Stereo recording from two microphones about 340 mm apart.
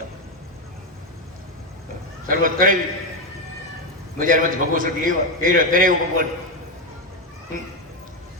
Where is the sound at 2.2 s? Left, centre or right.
Right.